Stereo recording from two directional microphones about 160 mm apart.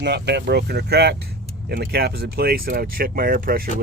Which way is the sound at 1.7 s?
70° right (ahead or behind).